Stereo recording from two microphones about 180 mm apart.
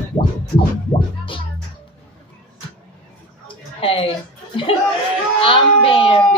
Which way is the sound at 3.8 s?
30° left (ahead or behind).